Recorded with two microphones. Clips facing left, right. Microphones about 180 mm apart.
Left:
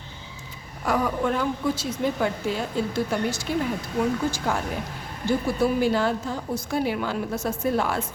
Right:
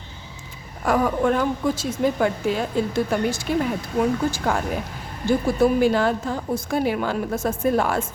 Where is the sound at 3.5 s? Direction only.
60° right (ahead or behind).